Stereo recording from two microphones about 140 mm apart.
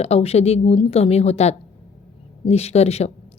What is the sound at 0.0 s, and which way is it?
A woman's voice, 45° left (ahead or behind).